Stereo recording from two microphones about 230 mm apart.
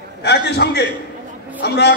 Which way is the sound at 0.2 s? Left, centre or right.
Left.